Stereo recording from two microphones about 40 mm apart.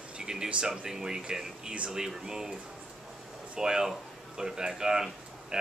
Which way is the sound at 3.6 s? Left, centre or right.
Centre.